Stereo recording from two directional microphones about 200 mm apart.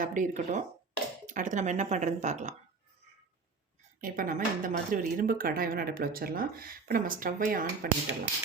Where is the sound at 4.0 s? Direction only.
45° right (ahead or behind).